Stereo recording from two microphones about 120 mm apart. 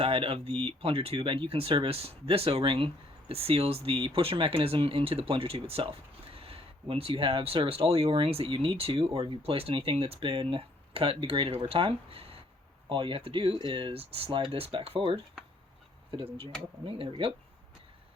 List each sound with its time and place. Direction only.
0.0 s speech: 50° right (ahead or behind)